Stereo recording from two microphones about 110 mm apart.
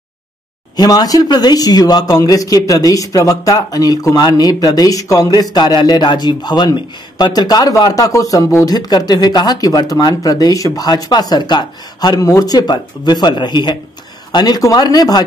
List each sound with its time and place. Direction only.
0.7 s speech: 35° left (ahead or behind)